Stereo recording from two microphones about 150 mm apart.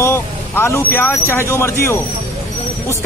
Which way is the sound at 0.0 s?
15° left (ahead or behind).